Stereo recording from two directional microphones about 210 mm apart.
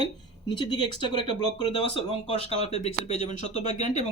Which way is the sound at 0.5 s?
20° left (ahead or behind).